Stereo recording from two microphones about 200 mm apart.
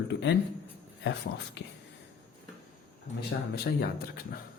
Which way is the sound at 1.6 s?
60° left (ahead or behind).